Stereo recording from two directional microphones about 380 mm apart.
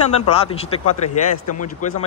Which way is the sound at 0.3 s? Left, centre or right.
Centre.